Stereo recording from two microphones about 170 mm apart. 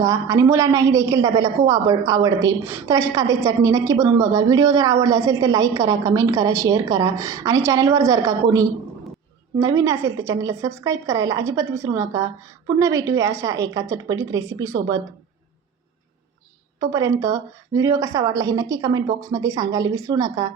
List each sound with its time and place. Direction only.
0.0 s a woman's voice: 20° right (ahead or behind)
16.8 s a woman's voice: 20° right (ahead or behind)